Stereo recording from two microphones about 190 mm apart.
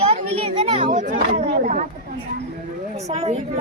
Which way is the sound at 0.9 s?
40° right (ahead or behind).